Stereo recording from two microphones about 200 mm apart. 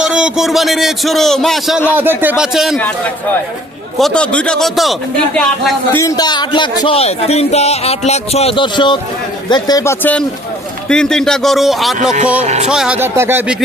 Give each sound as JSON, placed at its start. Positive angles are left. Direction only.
{"t": 0.0, "sound": "a man's voice", "side_deg": -5}
{"t": 3.9, "sound": "a man's voice", "side_deg": 5}
{"t": 5.9, "sound": "a man's voice", "side_deg": 15}